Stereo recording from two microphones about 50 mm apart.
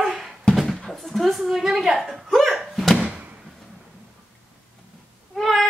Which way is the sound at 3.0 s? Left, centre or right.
Right.